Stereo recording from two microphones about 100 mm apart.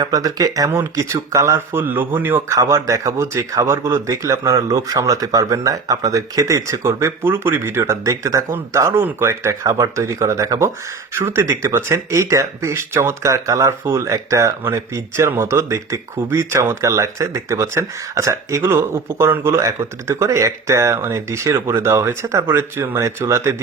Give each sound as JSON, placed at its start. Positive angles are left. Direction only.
{"t": 0.0, "sound": "speech", "side_deg": -40}
{"t": 2.6, "sound": "speech", "side_deg": -35}